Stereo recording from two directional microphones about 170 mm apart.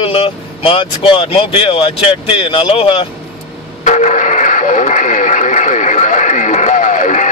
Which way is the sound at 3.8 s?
45° left (ahead or behind).